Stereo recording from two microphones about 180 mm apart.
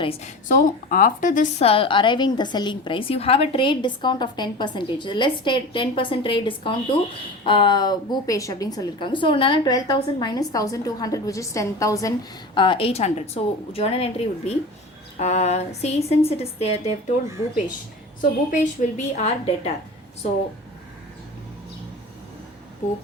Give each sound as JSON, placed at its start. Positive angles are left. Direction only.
{"t": 0.0, "sound": "a woman's voice", "side_deg": 35}
{"t": 0.4, "sound": "a woman's voice", "side_deg": 50}
{"t": 1.6, "sound": "a woman's voice", "side_deg": 30}
{"t": 12.5, "sound": "a woman's voice", "side_deg": 30}
{"t": 18.2, "sound": "a woman's voice", "side_deg": 45}